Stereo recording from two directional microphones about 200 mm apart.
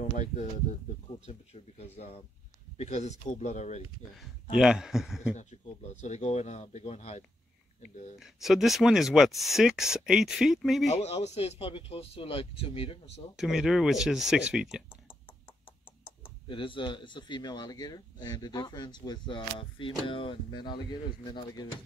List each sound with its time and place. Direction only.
1.2 s speech: 30° left (ahead or behind)
4.2 s speech: centre (ahead or behind)
5.3 s speech: 35° left (ahead or behind)
8.2 s speech: centre (ahead or behind)
10.9 s speech: 35° left (ahead or behind)
13.4 s speech: centre (ahead or behind)
16.4 s speech: 25° left (ahead or behind)